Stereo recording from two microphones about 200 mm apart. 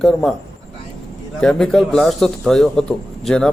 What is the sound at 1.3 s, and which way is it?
A man's voice, centre (ahead or behind).